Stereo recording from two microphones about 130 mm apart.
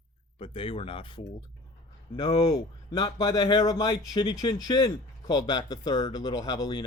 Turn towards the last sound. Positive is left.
turn(degrees=30)  # may be behind; listen again after turning